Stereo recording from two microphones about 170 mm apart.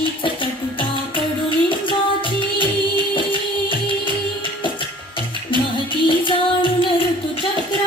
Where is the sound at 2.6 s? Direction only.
30° left (ahead or behind).